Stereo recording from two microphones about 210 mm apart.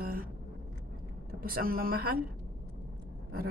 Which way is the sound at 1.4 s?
45° right (ahead or behind).